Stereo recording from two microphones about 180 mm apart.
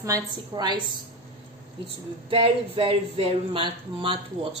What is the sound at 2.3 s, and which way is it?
Speech, 30° right (ahead or behind).